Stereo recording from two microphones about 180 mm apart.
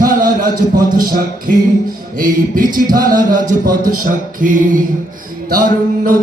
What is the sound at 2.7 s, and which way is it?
Music, 50° right (ahead or behind).